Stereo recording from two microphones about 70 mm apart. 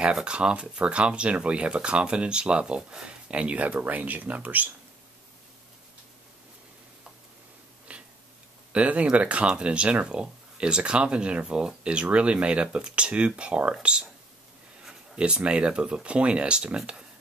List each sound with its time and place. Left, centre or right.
0.0 s speech: centre
7.9 s a sound: centre
8.7 s speech: centre
14.9 s speech: centre